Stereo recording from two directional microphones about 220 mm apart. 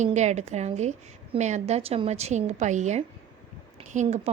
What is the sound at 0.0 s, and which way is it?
A woman's voice, 30° right (ahead or behind).